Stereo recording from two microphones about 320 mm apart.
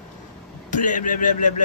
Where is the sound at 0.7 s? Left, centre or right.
Left.